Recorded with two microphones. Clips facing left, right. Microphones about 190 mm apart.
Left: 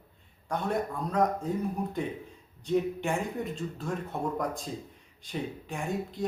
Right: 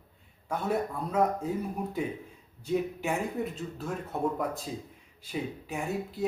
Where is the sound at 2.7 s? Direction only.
5° right (ahead or behind).